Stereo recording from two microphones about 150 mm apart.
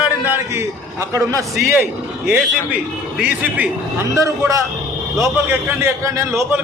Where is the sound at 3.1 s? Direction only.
10° right (ahead or behind).